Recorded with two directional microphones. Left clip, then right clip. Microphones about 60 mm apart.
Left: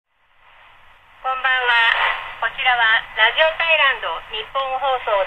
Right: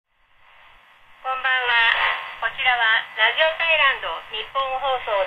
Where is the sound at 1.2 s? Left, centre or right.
Left.